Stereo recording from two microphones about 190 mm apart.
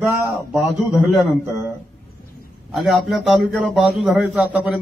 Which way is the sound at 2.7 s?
Centre (ahead or behind).